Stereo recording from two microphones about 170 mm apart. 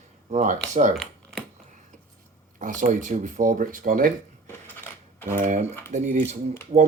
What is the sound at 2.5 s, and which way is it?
Speech, 50° right (ahead or behind).